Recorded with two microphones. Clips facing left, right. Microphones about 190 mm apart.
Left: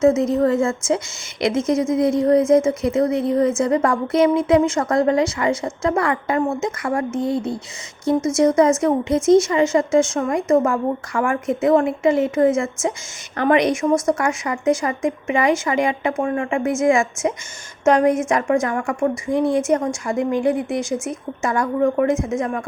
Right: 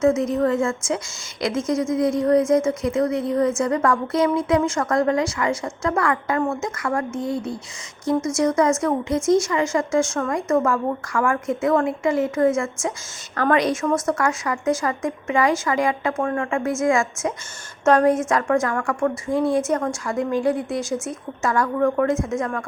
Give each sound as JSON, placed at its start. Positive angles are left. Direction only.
{"t": 0.0, "sound": "a woman's voice", "side_deg": 25}